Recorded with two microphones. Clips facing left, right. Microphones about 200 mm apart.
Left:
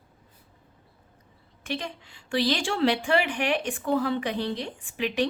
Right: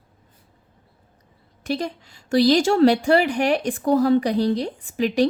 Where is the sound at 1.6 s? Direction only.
40° right (ahead or behind).